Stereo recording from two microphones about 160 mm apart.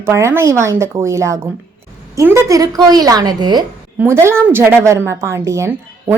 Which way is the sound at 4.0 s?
15° right (ahead or behind).